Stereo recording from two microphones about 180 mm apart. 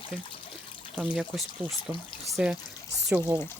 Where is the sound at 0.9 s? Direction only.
5° right (ahead or behind).